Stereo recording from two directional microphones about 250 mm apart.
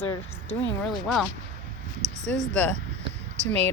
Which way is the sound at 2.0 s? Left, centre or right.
Right.